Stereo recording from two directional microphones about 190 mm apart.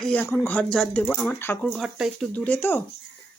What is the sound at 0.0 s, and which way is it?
Speech, 10° left (ahead or behind).